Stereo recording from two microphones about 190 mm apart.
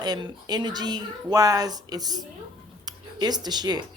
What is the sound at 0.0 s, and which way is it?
Speech, 20° right (ahead or behind).